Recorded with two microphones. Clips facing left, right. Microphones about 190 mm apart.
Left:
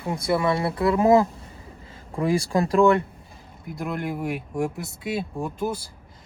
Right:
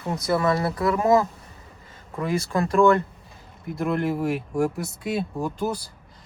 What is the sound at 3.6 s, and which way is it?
Speech, centre (ahead or behind).